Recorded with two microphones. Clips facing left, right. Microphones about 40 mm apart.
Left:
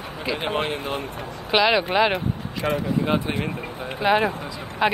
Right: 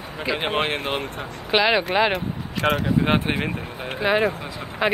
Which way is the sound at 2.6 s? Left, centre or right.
Right.